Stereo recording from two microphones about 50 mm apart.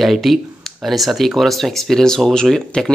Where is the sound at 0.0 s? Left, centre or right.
Centre.